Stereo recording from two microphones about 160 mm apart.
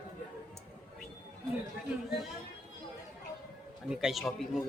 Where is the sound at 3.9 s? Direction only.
Centre (ahead or behind).